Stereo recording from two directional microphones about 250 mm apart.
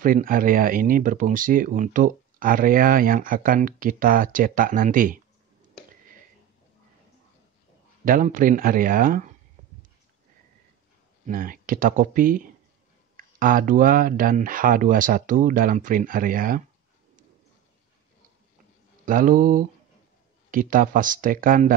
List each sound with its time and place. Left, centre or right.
0.0 s speech: right
8.0 s a man's voice: right
11.2 s speech: right
19.0 s speech: right